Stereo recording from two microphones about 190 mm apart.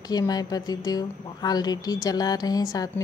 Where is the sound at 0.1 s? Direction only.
20° left (ahead or behind).